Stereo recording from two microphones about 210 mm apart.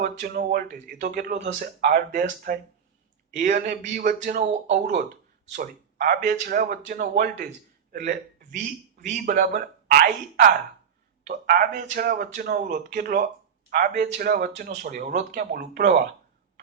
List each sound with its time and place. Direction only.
0.0 s a man's voice: 45° right (ahead or behind)